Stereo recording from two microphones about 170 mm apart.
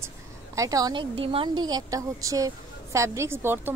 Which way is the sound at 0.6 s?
20° right (ahead or behind).